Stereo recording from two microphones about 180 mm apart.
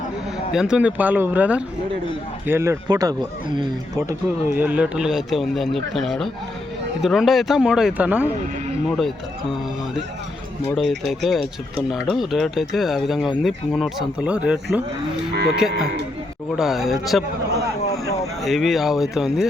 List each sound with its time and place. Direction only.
0.5 s speech: 5° right (ahead or behind); by 4.0 s 25° right (ahead or behind)
4.5 s speech: 10° right (ahead or behind)
18.4 s speech: centre (ahead or behind)